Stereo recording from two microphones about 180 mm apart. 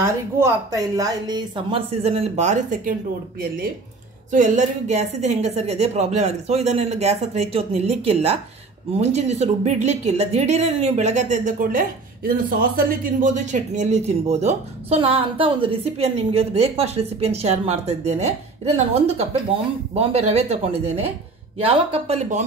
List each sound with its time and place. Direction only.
0.0 s speech: 20° right (ahead or behind); by 2.9 s 45° right (ahead or behind)
4.3 s speech: 45° right (ahead or behind)